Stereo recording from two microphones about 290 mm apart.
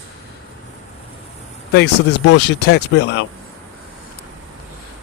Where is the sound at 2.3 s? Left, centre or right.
Left.